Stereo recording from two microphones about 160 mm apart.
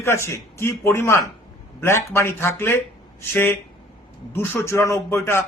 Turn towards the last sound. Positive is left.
turn(degrees=15)  # may be behind; listen again after turning